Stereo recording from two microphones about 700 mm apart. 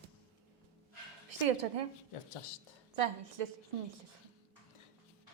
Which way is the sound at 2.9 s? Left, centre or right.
Right.